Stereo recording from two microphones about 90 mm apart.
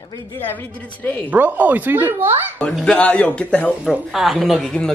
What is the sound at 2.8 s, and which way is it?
Speech, 15° left (ahead or behind).